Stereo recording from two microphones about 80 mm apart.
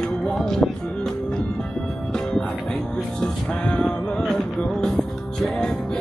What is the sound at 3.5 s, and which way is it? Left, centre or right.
Music, centre.